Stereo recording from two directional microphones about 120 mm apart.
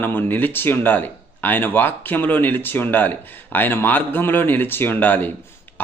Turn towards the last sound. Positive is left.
turn(degrees=15)  # may be behind; listen again after turning